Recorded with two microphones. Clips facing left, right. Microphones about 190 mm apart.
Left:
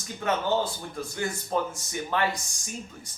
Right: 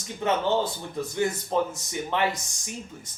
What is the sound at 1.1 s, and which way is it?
A man's voice, 20° right (ahead or behind).